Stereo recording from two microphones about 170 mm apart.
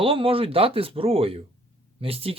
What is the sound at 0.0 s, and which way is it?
Speech, 30° right (ahead or behind).